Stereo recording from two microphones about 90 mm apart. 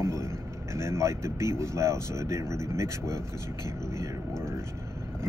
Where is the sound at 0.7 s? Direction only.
30° right (ahead or behind).